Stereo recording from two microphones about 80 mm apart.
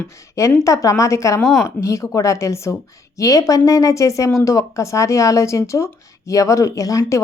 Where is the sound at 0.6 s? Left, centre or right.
Left.